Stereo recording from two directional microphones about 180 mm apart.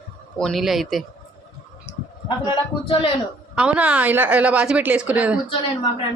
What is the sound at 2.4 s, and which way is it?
Speech, 30° left (ahead or behind).